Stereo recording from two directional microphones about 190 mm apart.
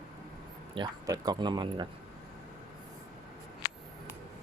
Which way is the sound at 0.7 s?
20° right (ahead or behind).